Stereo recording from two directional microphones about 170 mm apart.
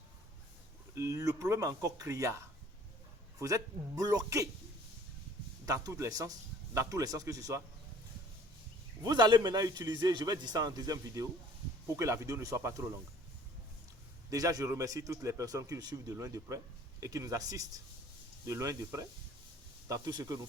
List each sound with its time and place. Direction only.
0.9 s a man's voice: 20° right (ahead or behind)
3.3 s a man's voice: 20° right (ahead or behind)
5.6 s a man's voice: 20° right (ahead or behind)
9.0 s a man's voice: 25° right (ahead or behind)
14.3 s a man's voice: 20° right (ahead or behind)